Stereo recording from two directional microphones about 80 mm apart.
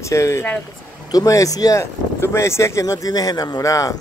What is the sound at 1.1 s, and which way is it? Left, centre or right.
Speech, left.